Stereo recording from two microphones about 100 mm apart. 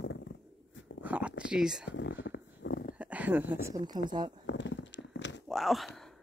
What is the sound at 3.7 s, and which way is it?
Speech, 45° right (ahead or behind).